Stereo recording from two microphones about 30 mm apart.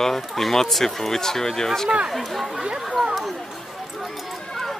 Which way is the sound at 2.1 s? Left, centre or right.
Centre.